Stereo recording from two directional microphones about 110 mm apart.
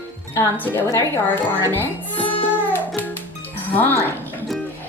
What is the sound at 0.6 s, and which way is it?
A woman's voice, 20° left (ahead or behind).